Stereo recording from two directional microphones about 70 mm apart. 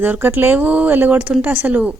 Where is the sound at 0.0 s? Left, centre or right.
Right.